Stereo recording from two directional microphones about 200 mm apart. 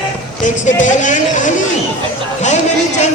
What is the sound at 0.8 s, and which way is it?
Music, 40° left (ahead or behind).